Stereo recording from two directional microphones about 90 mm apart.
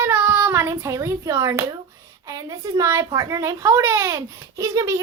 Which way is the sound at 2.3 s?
40° right (ahead or behind).